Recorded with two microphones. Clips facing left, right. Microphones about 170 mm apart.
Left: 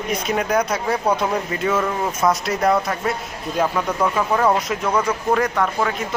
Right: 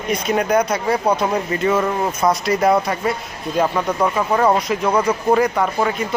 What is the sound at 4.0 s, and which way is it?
Speech, 5° right (ahead or behind).